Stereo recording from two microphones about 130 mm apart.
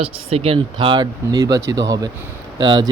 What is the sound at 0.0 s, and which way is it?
Speech, 50° right (ahead or behind).